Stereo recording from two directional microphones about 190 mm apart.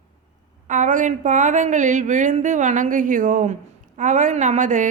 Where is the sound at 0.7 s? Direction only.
40° right (ahead or behind).